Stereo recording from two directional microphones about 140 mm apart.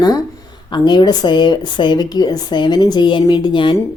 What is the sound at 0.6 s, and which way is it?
Speech, 30° left (ahead or behind).